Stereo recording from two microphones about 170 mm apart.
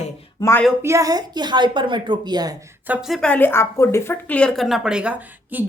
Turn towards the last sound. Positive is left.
turn(degrees=-10)  # may be behind; listen again after turning